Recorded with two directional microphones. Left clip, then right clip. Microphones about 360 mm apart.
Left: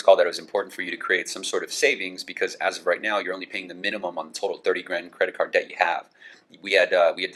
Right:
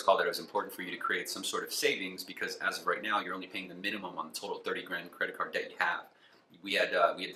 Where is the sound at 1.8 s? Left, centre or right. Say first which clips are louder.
Left 10 dB; right.